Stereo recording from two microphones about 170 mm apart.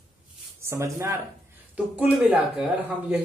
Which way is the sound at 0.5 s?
15° right (ahead or behind).